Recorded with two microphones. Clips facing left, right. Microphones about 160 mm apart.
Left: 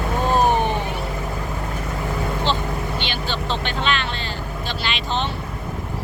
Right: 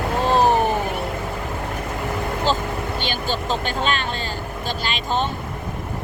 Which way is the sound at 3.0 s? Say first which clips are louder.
Right 2 dB; 45° right (ahead or behind).